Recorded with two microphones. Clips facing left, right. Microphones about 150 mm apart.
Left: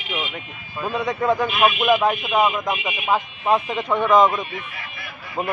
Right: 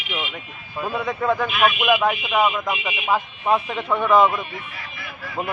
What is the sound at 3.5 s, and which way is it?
Speech, centre (ahead or behind).